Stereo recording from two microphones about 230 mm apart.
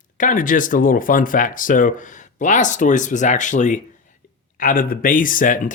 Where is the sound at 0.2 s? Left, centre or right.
Left.